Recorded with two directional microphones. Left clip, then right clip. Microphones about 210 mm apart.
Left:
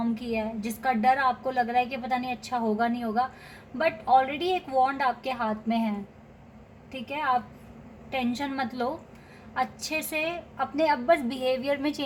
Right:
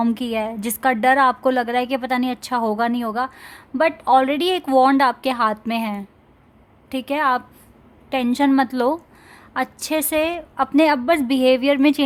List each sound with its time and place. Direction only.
0.0 s a woman's voice: 50° right (ahead or behind)
6.9 s a woman's voice: 50° right (ahead or behind)